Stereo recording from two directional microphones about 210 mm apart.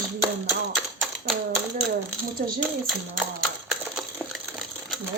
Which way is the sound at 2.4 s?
45° right (ahead or behind).